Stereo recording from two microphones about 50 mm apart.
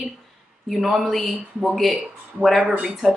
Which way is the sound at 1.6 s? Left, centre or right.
Centre.